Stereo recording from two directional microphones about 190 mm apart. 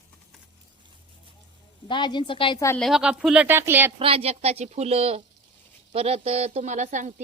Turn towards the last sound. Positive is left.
turn(degrees=-40)  # may be behind; listen again after turning